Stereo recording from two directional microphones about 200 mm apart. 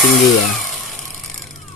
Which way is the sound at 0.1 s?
Centre (ahead or behind).